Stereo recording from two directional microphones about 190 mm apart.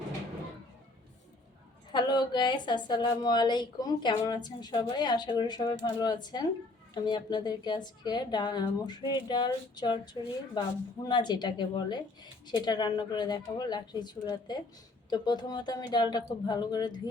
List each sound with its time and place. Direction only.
1.9 s a woman's voice: 25° left (ahead or behind)